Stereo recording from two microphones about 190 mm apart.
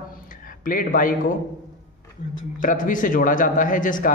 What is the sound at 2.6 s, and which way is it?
A man's voice, 45° left (ahead or behind).